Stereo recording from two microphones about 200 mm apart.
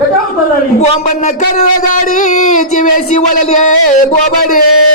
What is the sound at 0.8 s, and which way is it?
A man's voice, 35° left (ahead or behind).